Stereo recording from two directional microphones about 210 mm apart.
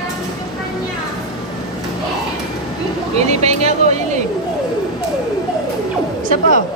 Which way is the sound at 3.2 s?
30° right (ahead or behind).